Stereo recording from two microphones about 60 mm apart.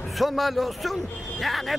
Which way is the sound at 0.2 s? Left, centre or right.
Centre.